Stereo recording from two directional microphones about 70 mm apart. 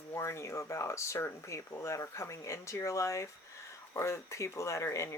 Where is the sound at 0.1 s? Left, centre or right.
Left.